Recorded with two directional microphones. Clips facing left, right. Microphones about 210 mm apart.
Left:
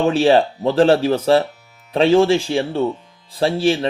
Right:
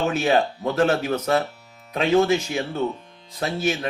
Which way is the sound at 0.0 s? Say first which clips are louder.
Left 6 dB; 30° left (ahead or behind).